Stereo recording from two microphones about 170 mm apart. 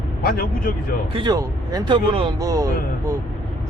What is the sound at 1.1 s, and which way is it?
Speech, 25° right (ahead or behind).